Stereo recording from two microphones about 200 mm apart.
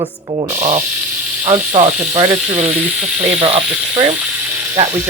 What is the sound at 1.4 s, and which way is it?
Speech, 35° right (ahead or behind).